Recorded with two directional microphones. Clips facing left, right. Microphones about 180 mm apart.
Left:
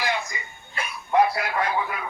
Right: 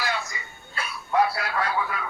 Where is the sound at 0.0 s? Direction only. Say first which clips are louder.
Left 2 dB; 15° left (ahead or behind).